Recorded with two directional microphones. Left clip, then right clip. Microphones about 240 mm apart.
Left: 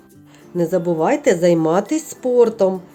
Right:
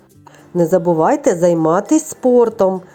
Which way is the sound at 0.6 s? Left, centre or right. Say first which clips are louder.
Right 5 dB; centre.